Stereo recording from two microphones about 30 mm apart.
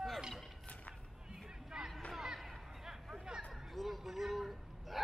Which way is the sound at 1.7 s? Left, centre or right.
Centre.